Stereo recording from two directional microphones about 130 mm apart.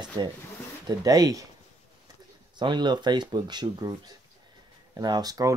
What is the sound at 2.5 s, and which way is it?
Speech, 35° right (ahead or behind).